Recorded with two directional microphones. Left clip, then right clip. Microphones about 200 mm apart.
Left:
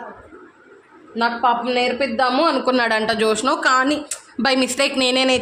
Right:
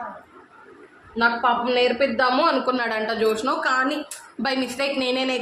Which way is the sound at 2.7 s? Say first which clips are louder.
Left 6 dB; 55° left (ahead or behind).